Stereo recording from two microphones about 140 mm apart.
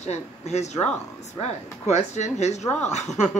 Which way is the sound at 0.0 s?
55° left (ahead or behind).